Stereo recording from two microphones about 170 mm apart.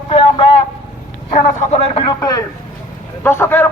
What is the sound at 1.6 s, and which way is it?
Speech, 40° left (ahead or behind).